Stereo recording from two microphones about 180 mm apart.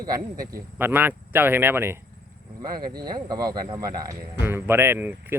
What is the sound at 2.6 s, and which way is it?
Speech, 25° right (ahead or behind).